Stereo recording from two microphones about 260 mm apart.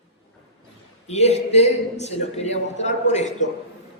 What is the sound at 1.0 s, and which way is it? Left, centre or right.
A man's voice, left.